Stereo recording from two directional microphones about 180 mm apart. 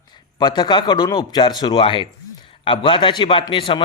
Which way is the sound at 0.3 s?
25° left (ahead or behind).